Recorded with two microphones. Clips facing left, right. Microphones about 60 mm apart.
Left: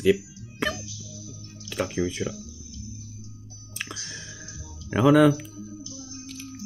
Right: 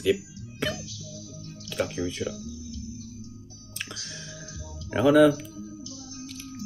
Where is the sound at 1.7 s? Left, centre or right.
Centre.